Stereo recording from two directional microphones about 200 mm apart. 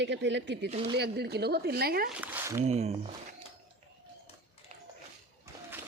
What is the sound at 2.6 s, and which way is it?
Speech, 35° right (ahead or behind).